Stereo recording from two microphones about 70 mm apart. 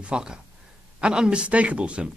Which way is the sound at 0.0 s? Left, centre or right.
Centre.